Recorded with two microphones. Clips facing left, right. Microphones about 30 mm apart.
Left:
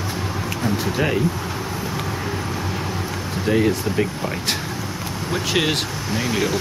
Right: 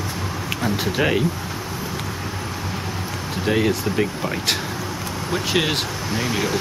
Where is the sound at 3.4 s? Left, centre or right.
Centre.